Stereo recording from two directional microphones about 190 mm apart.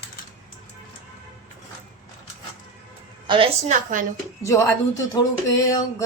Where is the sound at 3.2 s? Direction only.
25° right (ahead or behind).